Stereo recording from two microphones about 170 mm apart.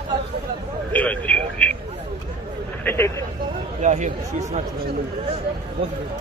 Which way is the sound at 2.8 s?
15° left (ahead or behind).